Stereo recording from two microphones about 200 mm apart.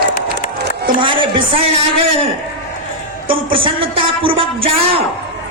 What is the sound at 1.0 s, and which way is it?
A man's voice, 25° right (ahead or behind).